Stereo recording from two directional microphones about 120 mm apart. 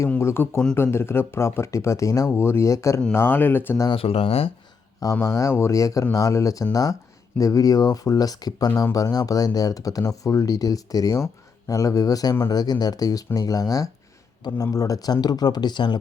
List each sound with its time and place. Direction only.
0.2 s speech: 20° left (ahead or behind)
3.9 s speech: 55° left (ahead or behind)
5.2 s speech: 25° left (ahead or behind)